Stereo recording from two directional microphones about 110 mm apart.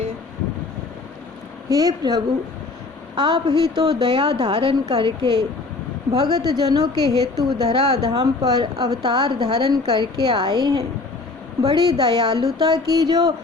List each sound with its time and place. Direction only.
1.7 s a woman's voice: 35° right (ahead or behind)